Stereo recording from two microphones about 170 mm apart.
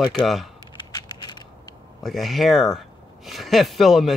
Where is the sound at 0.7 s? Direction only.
25° left (ahead or behind).